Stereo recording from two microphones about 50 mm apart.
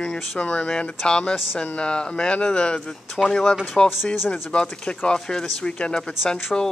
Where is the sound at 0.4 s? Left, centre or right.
Left.